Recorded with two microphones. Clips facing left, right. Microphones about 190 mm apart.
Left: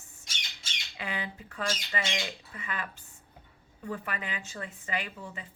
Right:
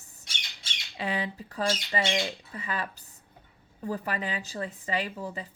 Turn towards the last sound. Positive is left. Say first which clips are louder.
# right 5 dB
turn(degrees=-35)  # may be behind; listen again after turning